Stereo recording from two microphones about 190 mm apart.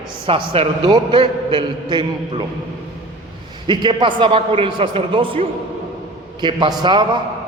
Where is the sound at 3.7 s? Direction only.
25° right (ahead or behind).